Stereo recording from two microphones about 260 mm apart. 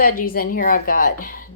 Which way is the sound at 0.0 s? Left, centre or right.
Left.